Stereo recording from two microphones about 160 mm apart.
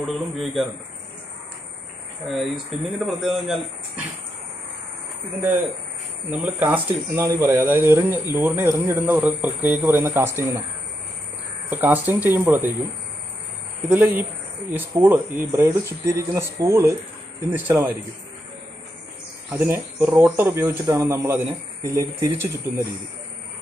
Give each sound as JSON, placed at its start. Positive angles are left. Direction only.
{"t": 0.0, "sound": "a man's voice", "side_deg": 0}
{"t": 2.2, "sound": "a man's voice", "side_deg": 0}
{"t": 6.3, "sound": "speech", "side_deg": -10}
{"t": 11.7, "sound": "speech", "side_deg": -10}
{"t": 13.8, "sound": "speech", "side_deg": -10}
{"t": 19.5, "sound": "speech", "side_deg": -10}